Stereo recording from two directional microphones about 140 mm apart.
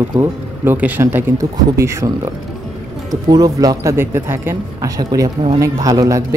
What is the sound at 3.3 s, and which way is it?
Speech, 25° right (ahead or behind).